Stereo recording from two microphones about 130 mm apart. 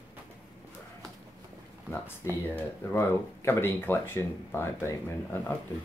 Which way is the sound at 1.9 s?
15° left (ahead or behind).